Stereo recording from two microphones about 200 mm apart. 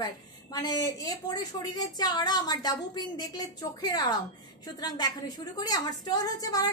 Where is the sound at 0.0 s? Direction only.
20° left (ahead or behind).